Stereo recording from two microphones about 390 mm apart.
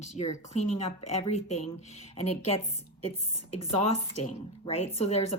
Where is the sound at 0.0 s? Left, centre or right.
Centre.